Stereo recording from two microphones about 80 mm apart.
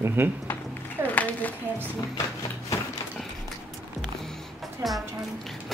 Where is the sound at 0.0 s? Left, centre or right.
Right.